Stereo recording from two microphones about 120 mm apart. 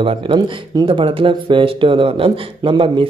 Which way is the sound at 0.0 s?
45° right (ahead or behind).